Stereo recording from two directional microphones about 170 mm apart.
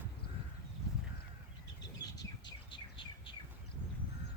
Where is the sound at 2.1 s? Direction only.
25° left (ahead or behind).